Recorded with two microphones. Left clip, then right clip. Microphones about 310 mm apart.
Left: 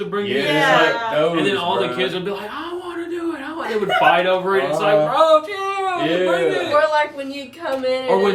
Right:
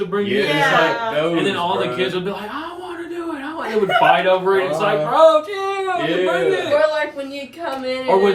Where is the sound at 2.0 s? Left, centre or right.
Centre.